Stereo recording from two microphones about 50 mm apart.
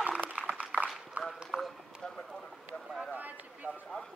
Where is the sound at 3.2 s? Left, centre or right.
Right.